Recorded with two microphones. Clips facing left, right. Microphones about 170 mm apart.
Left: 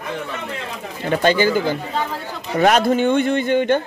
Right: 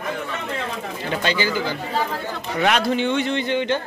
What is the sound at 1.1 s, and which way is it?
A man's voice, 50° left (ahead or behind).